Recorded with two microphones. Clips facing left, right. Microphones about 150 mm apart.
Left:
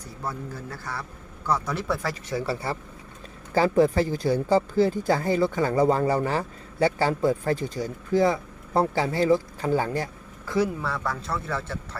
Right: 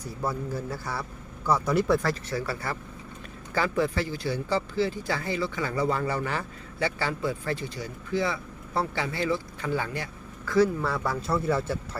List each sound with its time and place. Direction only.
0.3 s a man's voice: 5° right (ahead or behind)
2.3 s speech: 30° left (ahead or behind)
10.4 s speech: 20° left (ahead or behind)
10.8 s a man's voice: 5° right (ahead or behind)